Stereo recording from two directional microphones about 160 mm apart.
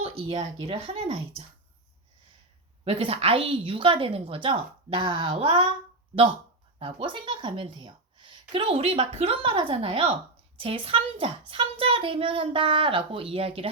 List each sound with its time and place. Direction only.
0.0 s a woman's voice: 40° right (ahead or behind)
2.8 s a woman's voice: 35° right (ahead or behind)
6.7 s a woman's voice: 35° right (ahead or behind)